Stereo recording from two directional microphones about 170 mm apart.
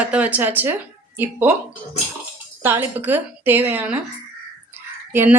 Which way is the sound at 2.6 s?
15° right (ahead or behind).